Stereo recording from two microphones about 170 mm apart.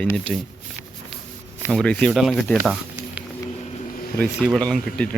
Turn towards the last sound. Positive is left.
turn(degrees=5)  # may be behind; listen again after turning